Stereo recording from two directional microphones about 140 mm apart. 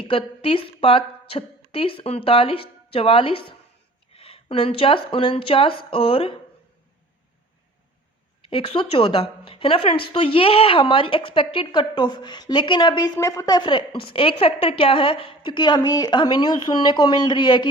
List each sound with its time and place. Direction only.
0.0 s speech: 40° left (ahead or behind)
8.4 s speech: 40° left (ahead or behind)